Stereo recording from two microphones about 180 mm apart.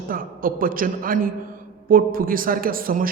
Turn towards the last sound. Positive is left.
turn(degrees=-50)  # may be behind; listen again after turning